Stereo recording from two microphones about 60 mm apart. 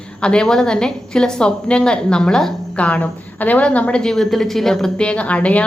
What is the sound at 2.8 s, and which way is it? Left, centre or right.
A woman's voice, left.